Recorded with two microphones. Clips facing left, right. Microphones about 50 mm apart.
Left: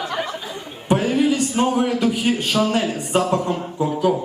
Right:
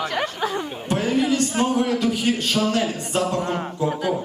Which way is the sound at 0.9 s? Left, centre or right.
Centre.